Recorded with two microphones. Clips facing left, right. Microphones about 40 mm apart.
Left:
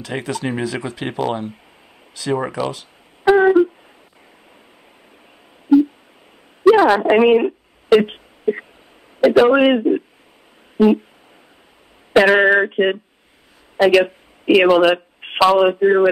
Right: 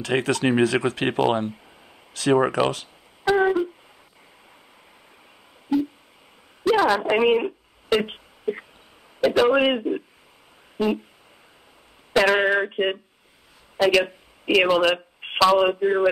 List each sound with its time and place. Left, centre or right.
0.0 s speech: right
3.3 s a sound: centre
6.7 s radio: centre
9.2 s a man's voice: centre
12.1 s a man's voice: left